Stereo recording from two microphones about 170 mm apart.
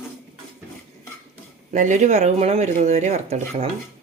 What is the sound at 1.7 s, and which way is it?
Speech, 45° right (ahead or behind).